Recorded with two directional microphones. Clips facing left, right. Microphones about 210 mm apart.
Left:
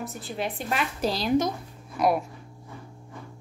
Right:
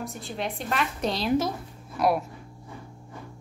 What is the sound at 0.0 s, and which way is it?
A woman's voice, centre (ahead or behind).